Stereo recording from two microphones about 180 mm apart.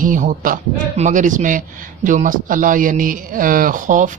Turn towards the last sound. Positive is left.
turn(degrees=-45)  # may be behind; listen again after turning